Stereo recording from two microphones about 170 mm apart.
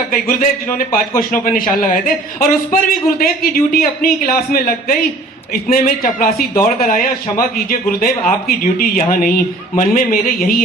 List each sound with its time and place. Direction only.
0.1 s a man's voice: 55° left (ahead or behind)